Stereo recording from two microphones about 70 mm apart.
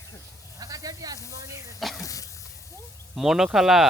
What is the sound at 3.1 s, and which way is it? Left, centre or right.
Speech, centre.